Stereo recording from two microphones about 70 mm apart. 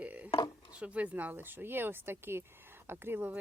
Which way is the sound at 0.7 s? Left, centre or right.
Centre.